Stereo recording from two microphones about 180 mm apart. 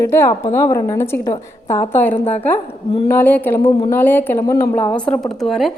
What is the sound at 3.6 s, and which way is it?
Speech, 30° left (ahead or behind).